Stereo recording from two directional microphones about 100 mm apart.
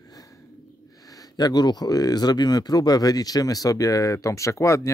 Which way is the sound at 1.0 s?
40° left (ahead or behind).